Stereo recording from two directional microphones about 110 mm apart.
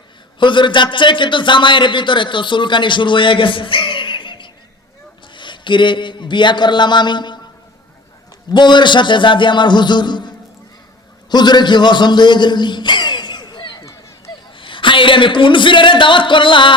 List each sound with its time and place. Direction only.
0.3 s a man's voice: 45° left (ahead or behind)
8.4 s a man's voice: 45° left (ahead or behind)